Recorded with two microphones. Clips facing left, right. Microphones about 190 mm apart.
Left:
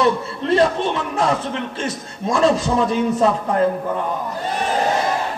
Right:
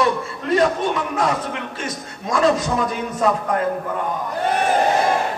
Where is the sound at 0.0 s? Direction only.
30° left (ahead or behind).